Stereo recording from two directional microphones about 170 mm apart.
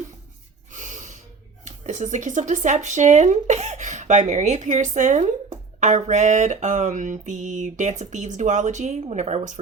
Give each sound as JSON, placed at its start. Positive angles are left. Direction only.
{"t": 0.7, "sound": "snort", "side_deg": -45}
{"t": 1.6, "sound": "speech", "side_deg": -45}